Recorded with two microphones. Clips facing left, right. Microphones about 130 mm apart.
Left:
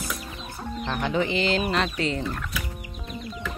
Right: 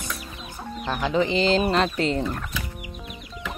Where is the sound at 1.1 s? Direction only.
30° right (ahead or behind).